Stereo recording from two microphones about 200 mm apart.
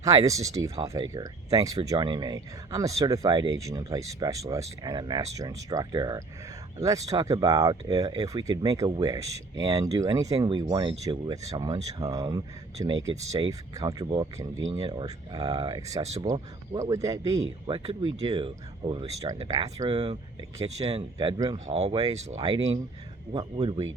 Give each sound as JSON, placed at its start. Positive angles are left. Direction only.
{"t": 0.0, "sound": "speech", "side_deg": -15}
{"t": 15.9, "sound": "speech", "side_deg": -30}
{"t": 16.2, "sound": "speech", "side_deg": -15}
{"t": 17.4, "sound": "speech", "side_deg": -30}
{"t": 21.2, "sound": "speech", "side_deg": -20}
{"t": 21.7, "sound": "speech", "side_deg": -30}
{"t": 22.4, "sound": "speech", "side_deg": -20}